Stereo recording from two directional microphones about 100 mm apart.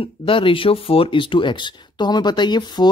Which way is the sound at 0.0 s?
65° left (ahead or behind).